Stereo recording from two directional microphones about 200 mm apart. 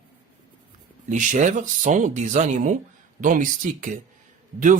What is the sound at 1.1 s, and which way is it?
Speech, 40° right (ahead or behind).